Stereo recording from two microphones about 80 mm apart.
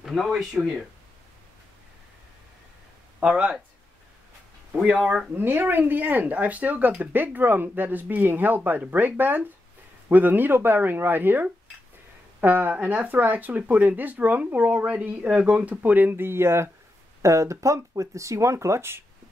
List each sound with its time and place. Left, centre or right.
0.0 s speech: centre
3.2 s speech: centre
5.4 s speech: right